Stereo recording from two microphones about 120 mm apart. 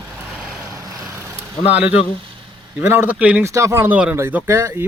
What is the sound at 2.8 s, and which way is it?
Speech, 15° right (ahead or behind).